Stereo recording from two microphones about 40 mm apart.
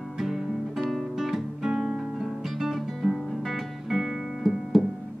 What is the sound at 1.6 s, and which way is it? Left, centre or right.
Guitar, centre.